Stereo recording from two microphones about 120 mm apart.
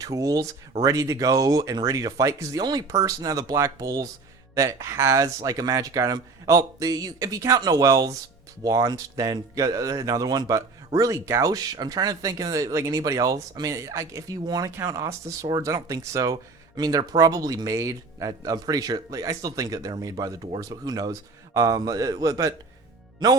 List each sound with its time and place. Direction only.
0.0 s a man's voice: 30° right (ahead or behind)